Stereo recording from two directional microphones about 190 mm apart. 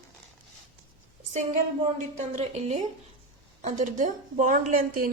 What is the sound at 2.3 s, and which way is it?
A woman's voice, 35° right (ahead or behind).